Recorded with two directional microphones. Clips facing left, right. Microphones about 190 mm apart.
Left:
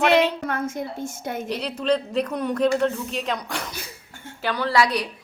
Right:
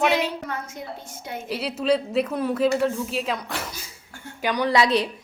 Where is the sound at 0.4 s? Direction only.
55° left (ahead or behind).